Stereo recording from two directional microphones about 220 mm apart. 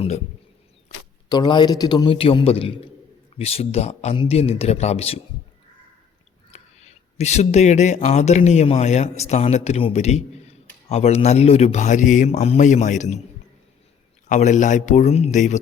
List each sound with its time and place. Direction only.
1.3 s speech: 20° left (ahead or behind)
6.5 s speech: 30° left (ahead or behind)
14.3 s speech: 35° left (ahead or behind)